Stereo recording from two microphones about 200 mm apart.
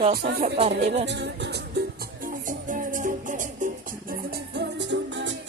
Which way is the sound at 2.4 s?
40° right (ahead or behind).